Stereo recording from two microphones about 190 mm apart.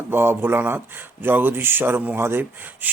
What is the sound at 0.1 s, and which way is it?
Speech, 10° right (ahead or behind).